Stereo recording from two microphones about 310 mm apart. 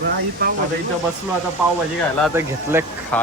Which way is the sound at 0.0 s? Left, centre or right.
Right.